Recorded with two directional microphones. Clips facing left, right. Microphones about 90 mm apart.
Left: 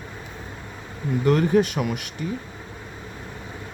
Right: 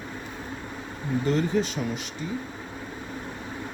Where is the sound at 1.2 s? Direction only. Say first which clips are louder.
Left 7 dB; 60° left (ahead or behind).